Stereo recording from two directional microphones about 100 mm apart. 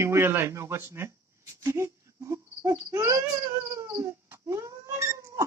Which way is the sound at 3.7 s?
30° right (ahead or behind).